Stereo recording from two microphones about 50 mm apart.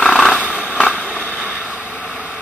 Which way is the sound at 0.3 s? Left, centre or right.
Left.